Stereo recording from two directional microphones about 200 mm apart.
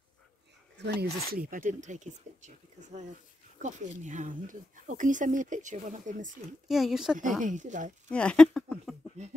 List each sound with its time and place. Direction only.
0.7 s speech: 50° right (ahead or behind)
6.7 s speech: centre (ahead or behind)
7.4 s speech: 40° right (ahead or behind)
8.1 s speech: 5° left (ahead or behind)